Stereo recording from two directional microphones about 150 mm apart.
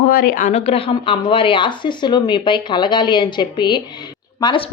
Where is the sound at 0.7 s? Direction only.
35° left (ahead or behind).